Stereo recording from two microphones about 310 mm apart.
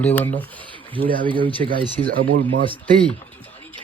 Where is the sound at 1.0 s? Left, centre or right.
Right.